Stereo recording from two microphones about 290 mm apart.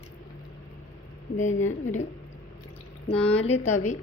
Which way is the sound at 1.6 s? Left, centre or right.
Left.